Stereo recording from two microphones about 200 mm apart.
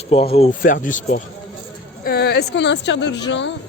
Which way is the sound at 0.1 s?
30° left (ahead or behind).